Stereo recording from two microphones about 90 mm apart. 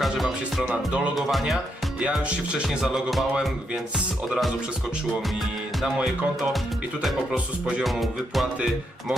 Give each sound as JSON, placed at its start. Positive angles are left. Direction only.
{"t": 0.0, "sound": "music", "side_deg": 0}
{"t": 0.7, "sound": "music", "side_deg": -15}
{"t": 1.1, "sound": "music", "side_deg": 0}
{"t": 2.0, "sound": "music", "side_deg": -10}
{"t": 5.8, "sound": "music", "side_deg": -5}
{"t": 7.9, "sound": "music", "side_deg": 0}